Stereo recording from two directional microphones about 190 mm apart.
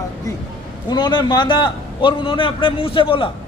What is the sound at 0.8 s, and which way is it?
A man's voice, 25° left (ahead or behind).